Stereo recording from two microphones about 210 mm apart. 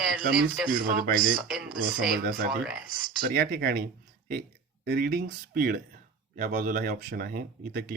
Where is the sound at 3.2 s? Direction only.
45° right (ahead or behind).